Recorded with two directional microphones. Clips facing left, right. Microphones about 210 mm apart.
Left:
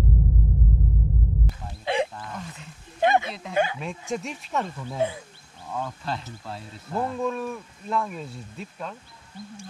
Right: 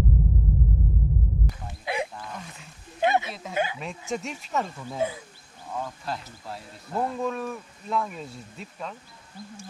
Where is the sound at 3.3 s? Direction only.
5° right (ahead or behind).